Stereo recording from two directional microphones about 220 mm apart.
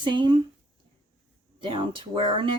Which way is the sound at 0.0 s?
20° right (ahead or behind).